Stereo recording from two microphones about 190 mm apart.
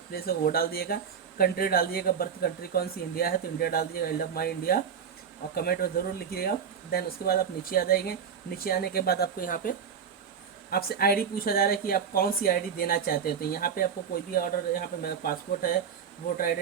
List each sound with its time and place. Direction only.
0.1 s speech: 50° left (ahead or behind)